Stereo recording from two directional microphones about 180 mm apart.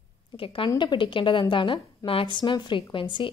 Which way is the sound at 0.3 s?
30° left (ahead or behind).